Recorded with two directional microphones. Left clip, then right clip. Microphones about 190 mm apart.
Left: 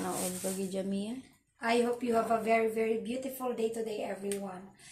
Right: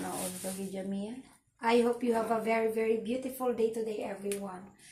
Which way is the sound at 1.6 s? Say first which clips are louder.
Right 2 dB; 15° left (ahead or behind).